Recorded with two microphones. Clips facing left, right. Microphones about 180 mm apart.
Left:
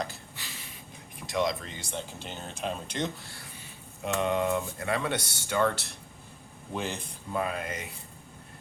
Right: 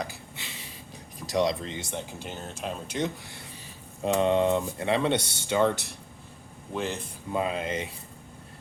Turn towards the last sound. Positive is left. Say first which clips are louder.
# right 3 dB
turn(degrees=-25)  # may be behind; listen again after turning